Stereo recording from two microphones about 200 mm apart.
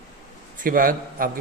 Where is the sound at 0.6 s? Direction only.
45° right (ahead or behind).